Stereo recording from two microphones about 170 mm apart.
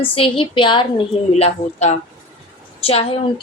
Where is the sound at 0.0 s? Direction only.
30° left (ahead or behind).